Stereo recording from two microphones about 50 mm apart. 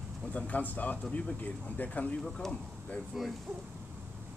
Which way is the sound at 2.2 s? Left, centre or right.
Centre.